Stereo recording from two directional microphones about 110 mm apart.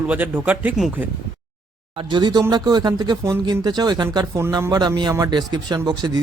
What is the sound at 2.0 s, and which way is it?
Speech, 45° right (ahead or behind).